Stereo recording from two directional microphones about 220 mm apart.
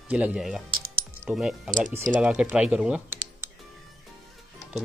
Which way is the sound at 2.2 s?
5° right (ahead or behind).